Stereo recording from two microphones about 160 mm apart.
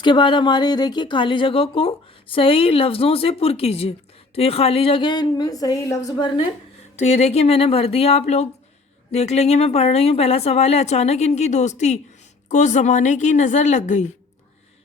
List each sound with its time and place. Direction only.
0.0 s a woman's voice: 30° left (ahead or behind)
7.0 s a woman's voice: 45° left (ahead or behind)